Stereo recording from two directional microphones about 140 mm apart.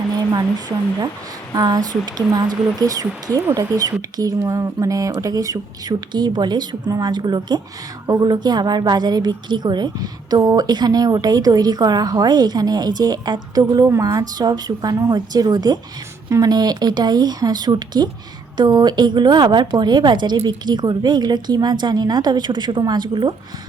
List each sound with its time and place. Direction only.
1.5 s a woman's voice: 25° right (ahead or behind)